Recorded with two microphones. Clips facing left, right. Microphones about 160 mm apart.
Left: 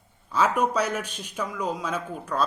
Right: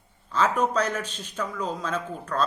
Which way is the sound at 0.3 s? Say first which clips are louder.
Left 1 dB; 10° left (ahead or behind).